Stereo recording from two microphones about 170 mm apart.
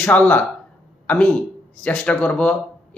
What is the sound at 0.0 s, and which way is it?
Speech, 5° left (ahead or behind).